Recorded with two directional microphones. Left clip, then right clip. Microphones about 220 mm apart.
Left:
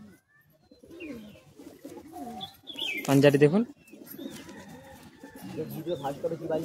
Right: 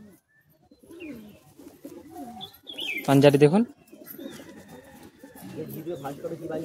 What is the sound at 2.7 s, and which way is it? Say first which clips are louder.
Pigeon: right 3 dB; 35° right (ahead or behind).